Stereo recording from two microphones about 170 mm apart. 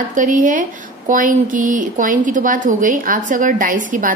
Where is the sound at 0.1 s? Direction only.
50° right (ahead or behind).